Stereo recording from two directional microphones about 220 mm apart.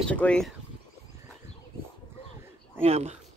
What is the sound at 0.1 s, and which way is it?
Speech, 5° left (ahead or behind).